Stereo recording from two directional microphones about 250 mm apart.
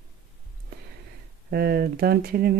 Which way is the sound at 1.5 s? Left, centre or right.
Right.